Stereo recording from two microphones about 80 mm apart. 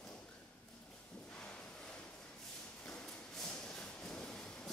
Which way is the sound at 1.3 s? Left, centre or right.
Centre.